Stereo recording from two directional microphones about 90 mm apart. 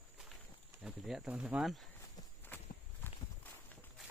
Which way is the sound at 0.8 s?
5° right (ahead or behind).